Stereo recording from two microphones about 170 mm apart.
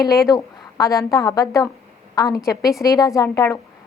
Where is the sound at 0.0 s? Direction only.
20° left (ahead or behind).